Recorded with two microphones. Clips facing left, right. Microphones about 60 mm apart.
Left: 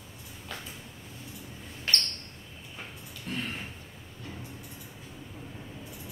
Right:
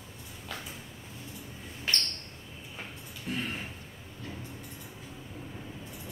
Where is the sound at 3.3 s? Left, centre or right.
Centre.